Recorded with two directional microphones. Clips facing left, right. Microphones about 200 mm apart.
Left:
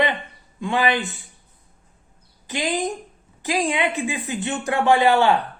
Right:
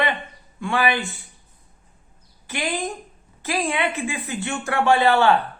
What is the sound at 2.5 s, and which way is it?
A woman's voice, 15° left (ahead or behind).